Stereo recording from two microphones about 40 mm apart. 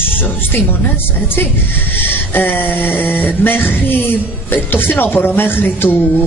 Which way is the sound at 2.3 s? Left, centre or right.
Left.